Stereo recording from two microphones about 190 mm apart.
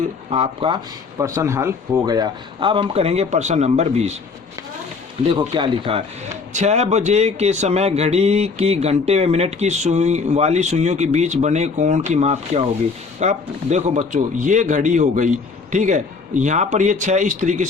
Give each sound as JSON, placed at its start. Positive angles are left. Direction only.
{"t": 0.3, "sound": "speech", "side_deg": -30}
{"t": 1.2, "sound": "speech", "side_deg": -15}
{"t": 5.3, "sound": "speech", "side_deg": -25}
{"t": 6.5, "sound": "speech", "side_deg": -35}